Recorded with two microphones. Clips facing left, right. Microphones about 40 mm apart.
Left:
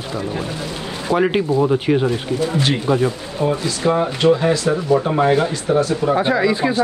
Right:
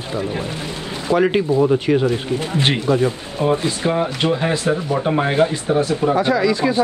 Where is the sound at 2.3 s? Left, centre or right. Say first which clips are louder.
Left 1 dB; right.